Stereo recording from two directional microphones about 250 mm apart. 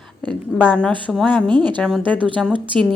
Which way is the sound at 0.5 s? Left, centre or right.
Centre.